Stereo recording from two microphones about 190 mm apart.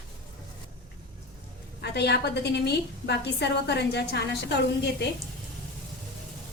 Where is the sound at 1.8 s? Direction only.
60° left (ahead or behind).